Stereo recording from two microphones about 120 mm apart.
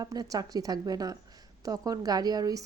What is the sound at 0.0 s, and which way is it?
Speech, 30° right (ahead or behind).